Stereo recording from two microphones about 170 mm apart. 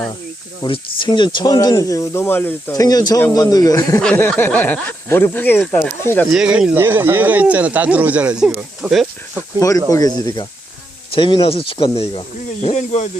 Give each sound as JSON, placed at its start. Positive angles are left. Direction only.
{"t": 0.6, "sound": "speech", "side_deg": 25}
{"t": 4.0, "sound": "speech", "side_deg": 10}
{"t": 6.3, "sound": "speech", "side_deg": -5}
{"t": 9.6, "sound": "speech", "side_deg": 20}
{"t": 12.6, "sound": "speech", "side_deg": 40}